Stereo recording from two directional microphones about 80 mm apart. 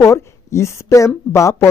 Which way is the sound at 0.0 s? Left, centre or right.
Left.